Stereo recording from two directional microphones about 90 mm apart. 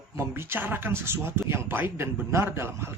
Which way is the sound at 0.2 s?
25° right (ahead or behind).